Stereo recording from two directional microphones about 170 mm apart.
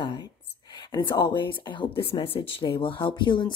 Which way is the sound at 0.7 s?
25° left (ahead or behind).